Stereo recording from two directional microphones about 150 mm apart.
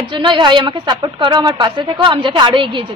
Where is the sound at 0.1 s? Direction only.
30° right (ahead or behind).